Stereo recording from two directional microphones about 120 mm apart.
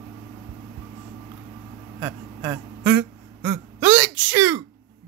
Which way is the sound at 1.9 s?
20° right (ahead or behind).